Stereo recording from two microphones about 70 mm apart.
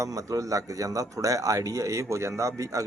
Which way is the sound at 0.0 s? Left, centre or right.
Right.